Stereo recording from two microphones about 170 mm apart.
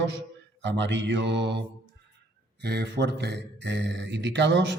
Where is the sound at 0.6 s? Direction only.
90° right.